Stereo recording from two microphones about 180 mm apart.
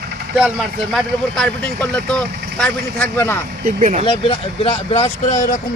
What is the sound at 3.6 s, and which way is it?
Speech, 45° right (ahead or behind).